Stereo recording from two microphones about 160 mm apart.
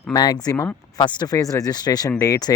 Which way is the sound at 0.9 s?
25° left (ahead or behind).